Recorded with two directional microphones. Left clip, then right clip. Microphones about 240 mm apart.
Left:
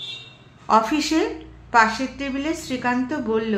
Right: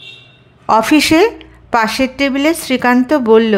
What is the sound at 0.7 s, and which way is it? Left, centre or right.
A woman's voice, right.